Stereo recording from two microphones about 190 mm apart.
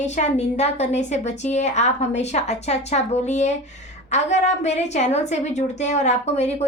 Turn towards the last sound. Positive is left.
turn(degrees=35)  # may be behind; listen again after turning